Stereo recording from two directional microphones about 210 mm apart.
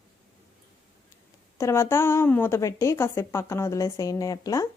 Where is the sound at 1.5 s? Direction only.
15° left (ahead or behind).